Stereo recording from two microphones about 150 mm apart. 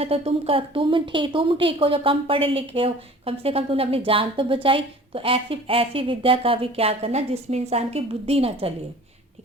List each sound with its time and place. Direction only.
0.0 s a woman's voice: 40° right (ahead or behind)